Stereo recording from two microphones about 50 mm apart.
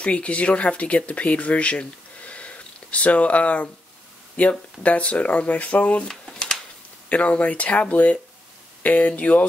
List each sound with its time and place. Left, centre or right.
0.0 s speech: left
6.0 s a sound: centre
7.1 s speech: left